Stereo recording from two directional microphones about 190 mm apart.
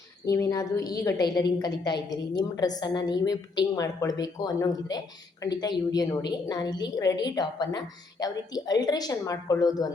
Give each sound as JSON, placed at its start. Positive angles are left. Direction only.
{"t": 0.3, "sound": "a woman's voice", "side_deg": 15}